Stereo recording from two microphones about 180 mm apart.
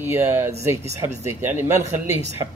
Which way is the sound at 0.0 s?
15° right (ahead or behind).